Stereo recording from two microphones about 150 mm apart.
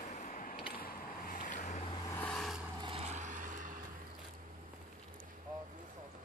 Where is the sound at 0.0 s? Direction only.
55° left (ahead or behind).